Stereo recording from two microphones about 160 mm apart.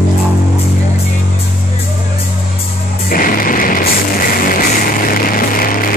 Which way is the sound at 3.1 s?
60° left (ahead or behind).